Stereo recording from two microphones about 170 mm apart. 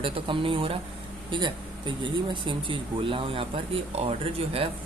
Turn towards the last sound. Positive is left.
turn(degrees=-35)  # may be behind; listen again after turning